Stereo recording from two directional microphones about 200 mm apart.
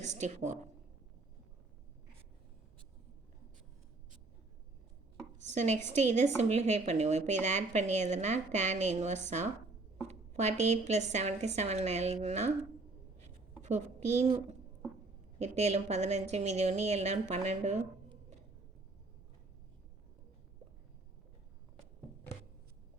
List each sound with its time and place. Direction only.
0.0 s a woman's voice: 35° right (ahead or behind)
5.5 s a woman's voice: 35° right (ahead or behind)
13.2 s writing: 35° right (ahead or behind)
15.4 s a woman's voice: 35° right (ahead or behind)